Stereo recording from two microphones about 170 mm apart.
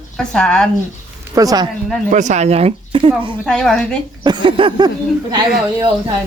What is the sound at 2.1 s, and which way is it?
Speech, 45° right (ahead or behind).